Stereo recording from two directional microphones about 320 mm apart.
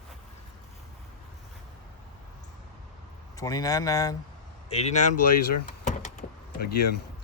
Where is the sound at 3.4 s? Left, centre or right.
Centre.